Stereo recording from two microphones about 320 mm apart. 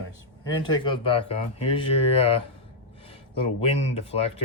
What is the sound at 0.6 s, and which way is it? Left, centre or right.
Speech, centre.